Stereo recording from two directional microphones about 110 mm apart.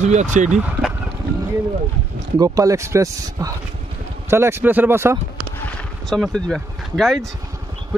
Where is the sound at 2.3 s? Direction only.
30° right (ahead or behind).